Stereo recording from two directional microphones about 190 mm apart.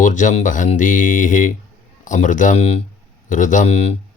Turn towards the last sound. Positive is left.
turn(degrees=35)  # may be behind; listen again after turning